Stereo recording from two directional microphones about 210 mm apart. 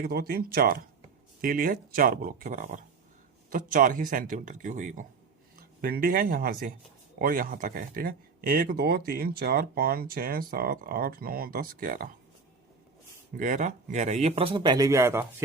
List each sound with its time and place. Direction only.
0.0 s speech: 50° right (ahead or behind)
13.3 s speech: 40° right (ahead or behind); by 15.3 s 10° right (ahead or behind)